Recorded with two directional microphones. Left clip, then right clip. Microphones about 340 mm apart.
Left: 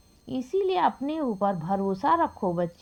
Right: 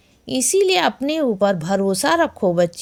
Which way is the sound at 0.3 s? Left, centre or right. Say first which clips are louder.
Right 10 dB; centre.